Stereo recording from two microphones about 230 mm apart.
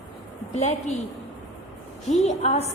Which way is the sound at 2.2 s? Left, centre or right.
Left.